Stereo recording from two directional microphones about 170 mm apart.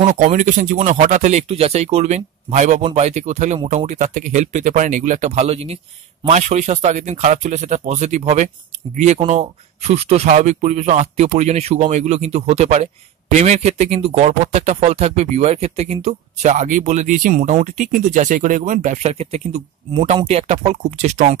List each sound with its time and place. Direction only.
0.0 s speech: 45° right (ahead or behind)